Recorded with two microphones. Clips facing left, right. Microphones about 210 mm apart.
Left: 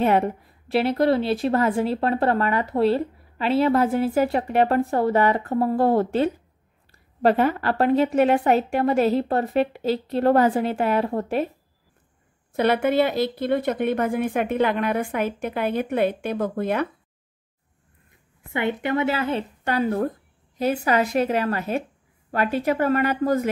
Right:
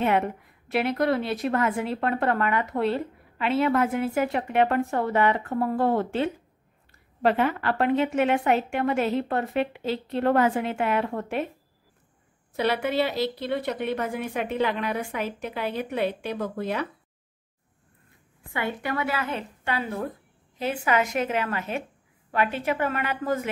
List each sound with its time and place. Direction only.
0.0 s a woman's voice: 35° left (ahead or behind)
12.5 s speech: 50° left (ahead or behind)
18.5 s a woman's voice: 20° left (ahead or behind); by 23.5 s 40° left (ahead or behind)